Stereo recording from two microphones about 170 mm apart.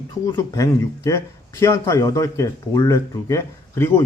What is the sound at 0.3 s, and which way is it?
A man's voice, 20° left (ahead or behind).